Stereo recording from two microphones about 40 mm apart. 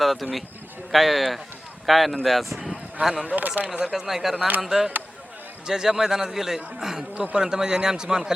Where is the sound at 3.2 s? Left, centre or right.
Right.